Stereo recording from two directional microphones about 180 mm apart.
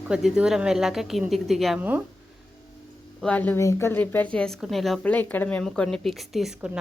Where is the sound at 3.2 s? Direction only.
10° left (ahead or behind).